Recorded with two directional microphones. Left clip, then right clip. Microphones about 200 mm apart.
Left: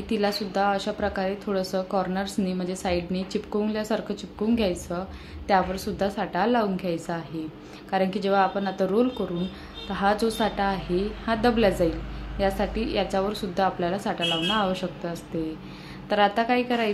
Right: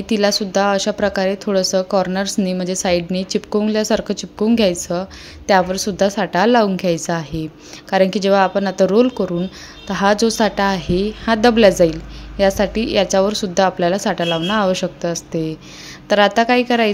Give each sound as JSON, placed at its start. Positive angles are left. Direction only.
{"t": 0.1, "sound": "speech", "side_deg": -45}